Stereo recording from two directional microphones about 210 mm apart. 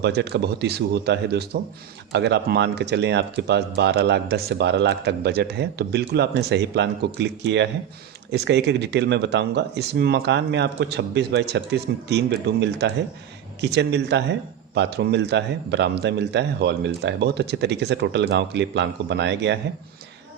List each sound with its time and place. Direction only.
0.0 s a man's voice: 55° right (ahead or behind)